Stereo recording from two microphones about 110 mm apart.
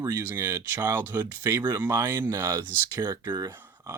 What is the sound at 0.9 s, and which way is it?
Speech, 20° right (ahead or behind).